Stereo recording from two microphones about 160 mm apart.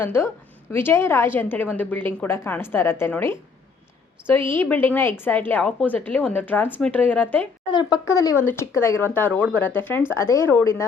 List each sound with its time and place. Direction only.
0.0 s a woman's voice: 15° left (ahead or behind)
7.7 s a woman's voice: 25° left (ahead or behind)